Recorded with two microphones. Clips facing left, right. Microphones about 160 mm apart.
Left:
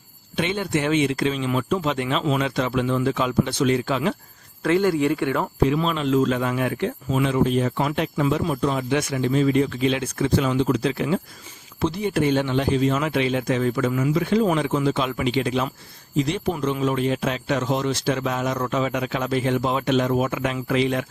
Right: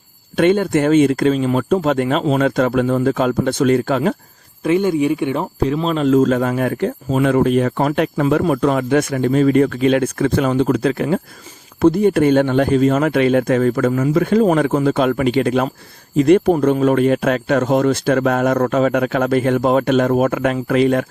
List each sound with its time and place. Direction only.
0.3 s speech: 50° right (ahead or behind)
4.6 s speech: 20° right (ahead or behind)
5.6 s speech: 40° right (ahead or behind)